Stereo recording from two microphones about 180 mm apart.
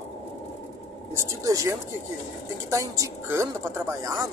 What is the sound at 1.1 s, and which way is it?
Speech, 20° right (ahead or behind).